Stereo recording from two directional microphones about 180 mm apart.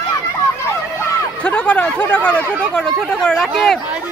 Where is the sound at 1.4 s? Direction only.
10° left (ahead or behind).